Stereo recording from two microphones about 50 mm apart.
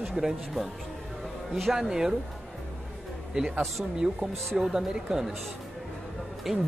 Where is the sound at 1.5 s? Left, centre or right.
Centre.